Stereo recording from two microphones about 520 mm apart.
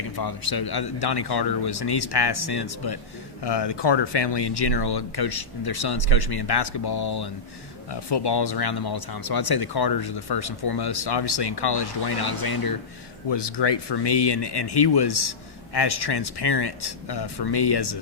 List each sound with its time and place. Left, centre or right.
0.2 s speech: left